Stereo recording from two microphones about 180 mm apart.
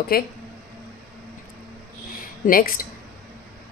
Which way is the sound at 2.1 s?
50° left (ahead or behind).